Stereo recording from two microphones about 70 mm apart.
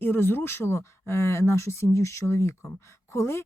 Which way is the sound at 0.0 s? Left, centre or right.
Left.